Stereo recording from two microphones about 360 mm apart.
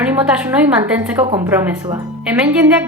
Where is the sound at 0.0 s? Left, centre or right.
Centre.